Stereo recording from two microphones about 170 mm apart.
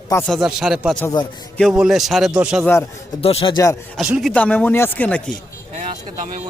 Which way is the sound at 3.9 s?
5° right (ahead or behind).